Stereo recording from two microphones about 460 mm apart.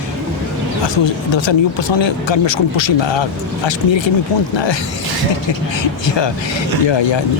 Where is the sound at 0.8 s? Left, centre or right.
Left.